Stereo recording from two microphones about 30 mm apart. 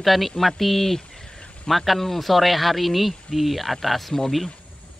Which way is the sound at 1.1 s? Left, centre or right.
Centre.